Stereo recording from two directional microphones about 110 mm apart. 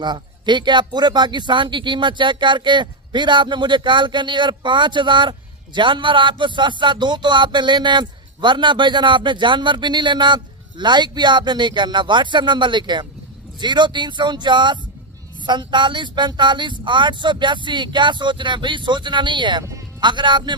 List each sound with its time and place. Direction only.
0.0 s speech: 45° right (ahead or behind)